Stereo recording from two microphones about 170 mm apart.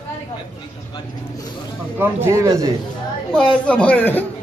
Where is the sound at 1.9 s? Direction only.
15° right (ahead or behind).